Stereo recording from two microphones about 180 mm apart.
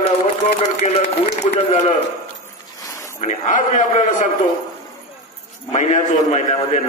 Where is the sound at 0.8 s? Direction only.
40° left (ahead or behind).